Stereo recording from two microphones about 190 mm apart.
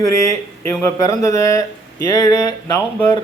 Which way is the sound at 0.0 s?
15° left (ahead or behind).